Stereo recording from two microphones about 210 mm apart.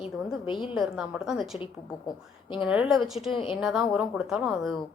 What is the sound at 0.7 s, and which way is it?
Speech, 5° right (ahead or behind).